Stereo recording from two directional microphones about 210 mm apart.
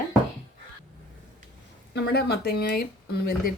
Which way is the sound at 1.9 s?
50° left (ahead or behind).